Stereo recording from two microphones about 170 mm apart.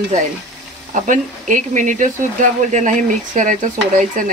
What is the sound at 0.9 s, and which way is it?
Speech, 50° right (ahead or behind).